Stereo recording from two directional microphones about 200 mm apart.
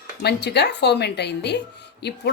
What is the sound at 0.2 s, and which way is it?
Speech, 55° left (ahead or behind).